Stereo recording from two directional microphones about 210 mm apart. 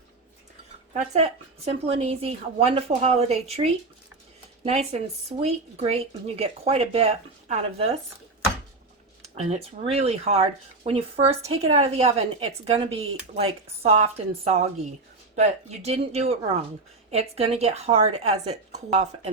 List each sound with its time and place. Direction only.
0.9 s speech: 30° right (ahead or behind)
9.2 s speech: 30° right (ahead or behind)